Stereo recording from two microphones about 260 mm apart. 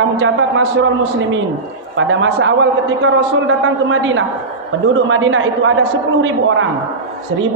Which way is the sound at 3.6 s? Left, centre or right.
Right.